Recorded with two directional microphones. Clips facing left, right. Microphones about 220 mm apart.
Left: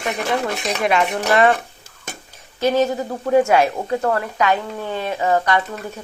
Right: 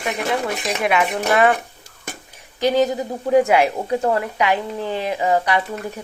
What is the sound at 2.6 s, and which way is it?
A woman's voice, 15° right (ahead or behind).